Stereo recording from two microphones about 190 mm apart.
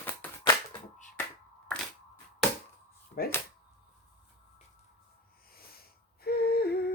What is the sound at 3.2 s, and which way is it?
Speech, 55° left (ahead or behind).